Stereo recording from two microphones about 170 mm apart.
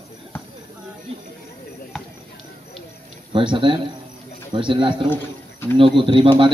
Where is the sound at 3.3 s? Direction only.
30° right (ahead or behind).